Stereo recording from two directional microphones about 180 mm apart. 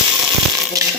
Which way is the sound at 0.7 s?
20° right (ahead or behind).